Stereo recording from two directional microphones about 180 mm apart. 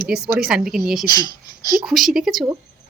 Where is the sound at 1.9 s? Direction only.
Centre (ahead or behind).